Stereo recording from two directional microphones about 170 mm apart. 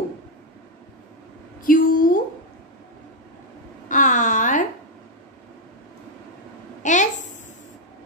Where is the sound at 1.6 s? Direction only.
55° left (ahead or behind).